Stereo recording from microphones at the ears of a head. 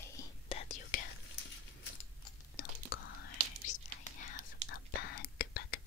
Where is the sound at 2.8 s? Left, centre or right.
Left.